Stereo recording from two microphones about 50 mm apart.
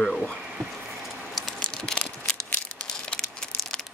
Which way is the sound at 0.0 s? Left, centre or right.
Centre.